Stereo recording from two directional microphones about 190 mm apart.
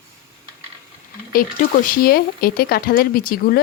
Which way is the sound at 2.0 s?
50° left (ahead or behind).